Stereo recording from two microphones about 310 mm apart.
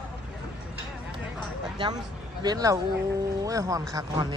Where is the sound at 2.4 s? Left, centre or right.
Centre.